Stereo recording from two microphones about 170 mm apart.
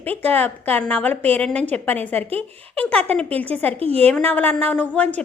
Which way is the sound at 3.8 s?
35° right (ahead or behind).